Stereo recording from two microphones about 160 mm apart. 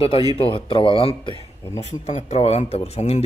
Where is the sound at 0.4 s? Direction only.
35° left (ahead or behind).